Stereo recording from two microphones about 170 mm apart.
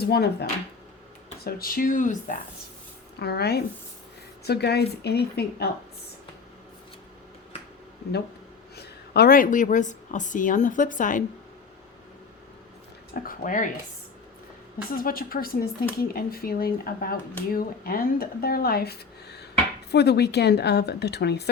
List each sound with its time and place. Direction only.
0.0 s speech: 70° left (ahead or behind)
1.5 s speech: 60° left (ahead or behind)
3.2 s speech: 70° left (ahead or behind)
8.7 s a woman's voice: 70° left (ahead or behind); by 11.2 s 50° left (ahead or behind)
13.2 s speech: 50° left (ahead or behind)
15.0 s speech: 55° left (ahead or behind); by 21.5 s 75° left (ahead or behind)